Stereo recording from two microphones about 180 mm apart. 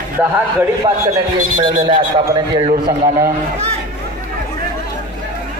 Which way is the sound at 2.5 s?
25° right (ahead or behind).